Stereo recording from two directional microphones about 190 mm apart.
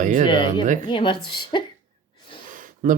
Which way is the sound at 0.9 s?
25° left (ahead or behind).